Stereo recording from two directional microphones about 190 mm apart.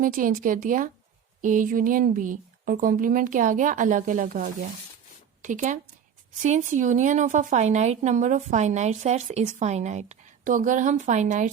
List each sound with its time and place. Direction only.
0.0 s a woman's voice: 45° right (ahead or behind)